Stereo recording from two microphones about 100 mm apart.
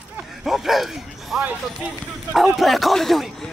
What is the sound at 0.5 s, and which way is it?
Speech, centre (ahead or behind).